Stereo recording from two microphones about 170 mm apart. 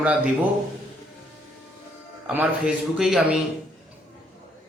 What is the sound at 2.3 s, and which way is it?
A man's voice, 5° right (ahead or behind).